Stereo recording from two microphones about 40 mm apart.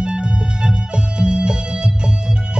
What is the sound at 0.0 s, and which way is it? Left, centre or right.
Music, right.